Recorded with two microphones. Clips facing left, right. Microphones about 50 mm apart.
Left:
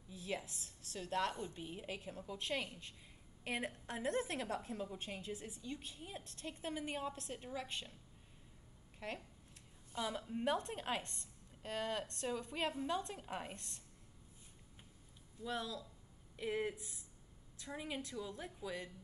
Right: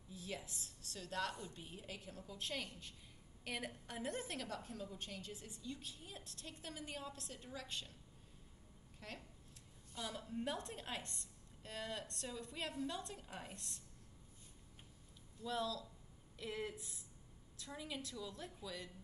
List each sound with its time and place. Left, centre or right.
0.1 s a woman's voice: left
4.0 s a woman's voice: centre
9.0 s a woman's voice: left
15.4 s a woman's voice: left